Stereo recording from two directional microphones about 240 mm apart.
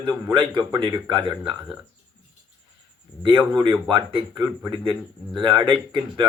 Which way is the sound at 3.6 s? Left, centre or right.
Centre.